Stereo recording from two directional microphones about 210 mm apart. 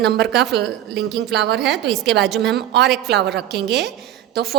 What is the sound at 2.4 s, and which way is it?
A woman's voice, 55° right (ahead or behind).